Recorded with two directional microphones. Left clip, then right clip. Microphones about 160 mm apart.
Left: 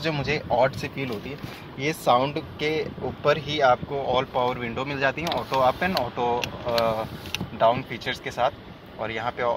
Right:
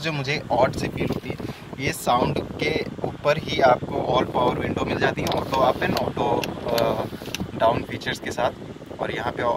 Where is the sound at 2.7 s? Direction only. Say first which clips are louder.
Right 1 dB; 5° right (ahead or behind).